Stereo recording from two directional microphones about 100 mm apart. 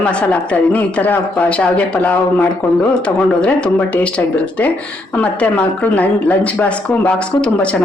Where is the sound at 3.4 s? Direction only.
10° left (ahead or behind).